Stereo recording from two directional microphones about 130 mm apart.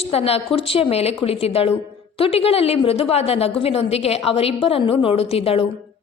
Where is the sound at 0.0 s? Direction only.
50° left (ahead or behind).